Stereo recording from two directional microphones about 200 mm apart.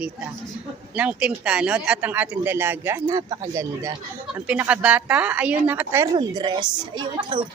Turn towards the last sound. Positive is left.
turn(degrees=-25)  # may be behind; listen again after turning